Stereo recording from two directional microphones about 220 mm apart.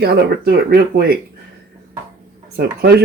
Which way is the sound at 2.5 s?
45° right (ahead or behind).